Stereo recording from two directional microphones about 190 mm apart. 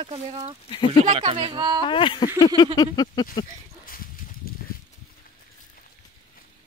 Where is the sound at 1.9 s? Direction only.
25° left (ahead or behind).